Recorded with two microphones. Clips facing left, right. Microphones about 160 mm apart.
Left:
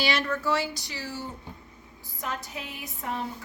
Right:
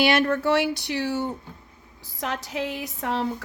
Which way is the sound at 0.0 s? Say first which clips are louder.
Right 7 dB; 55° right (ahead or behind).